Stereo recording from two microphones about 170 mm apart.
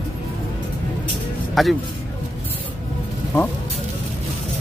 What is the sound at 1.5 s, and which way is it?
Speech, centre (ahead or behind).